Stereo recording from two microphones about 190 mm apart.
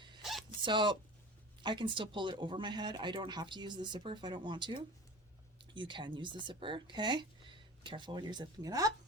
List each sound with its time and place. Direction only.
0.2 s zipper: centre (ahead or behind)
0.6 s speech: 25° right (ahead or behind)